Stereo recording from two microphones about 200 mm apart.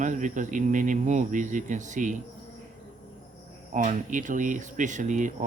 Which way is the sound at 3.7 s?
40° right (ahead or behind).